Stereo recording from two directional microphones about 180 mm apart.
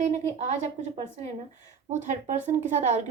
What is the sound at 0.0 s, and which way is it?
A woman's voice, 40° right (ahead or behind).